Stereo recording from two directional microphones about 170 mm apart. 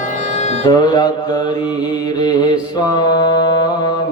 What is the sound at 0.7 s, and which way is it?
Mantra, 25° left (ahead or behind).